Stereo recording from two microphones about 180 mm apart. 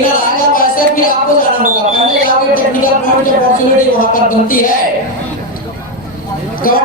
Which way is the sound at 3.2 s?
50° left (ahead or behind).